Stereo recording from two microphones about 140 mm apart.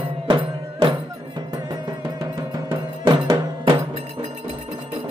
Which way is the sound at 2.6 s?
35° right (ahead or behind).